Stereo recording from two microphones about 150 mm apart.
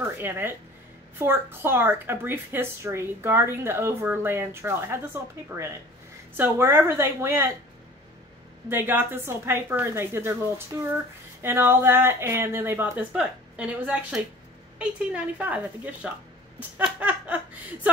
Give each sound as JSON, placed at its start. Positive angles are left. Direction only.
{"t": 0.2, "sound": "a woman's voice", "side_deg": -15}
{"t": 6.3, "sound": "a woman's voice", "side_deg": -15}
{"t": 8.6, "sound": "a woman's voice", "side_deg": -15}
{"t": 16.5, "sound": "a sound", "side_deg": -10}